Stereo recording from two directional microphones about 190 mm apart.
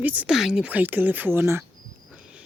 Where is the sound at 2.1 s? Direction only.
5° right (ahead or behind).